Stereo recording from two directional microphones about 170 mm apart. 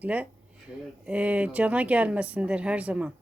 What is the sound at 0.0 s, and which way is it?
Speech, 10° right (ahead or behind).